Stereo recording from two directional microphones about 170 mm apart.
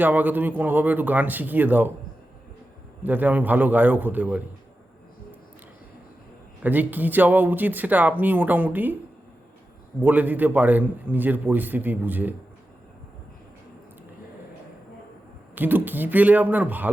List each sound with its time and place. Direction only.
0.0 s speech: 10° right (ahead or behind)
3.0 s speech: 10° right (ahead or behind)
6.6 s speech: 10° right (ahead or behind)
10.0 s speech: 10° right (ahead or behind)
15.5 s speech: 10° right (ahead or behind)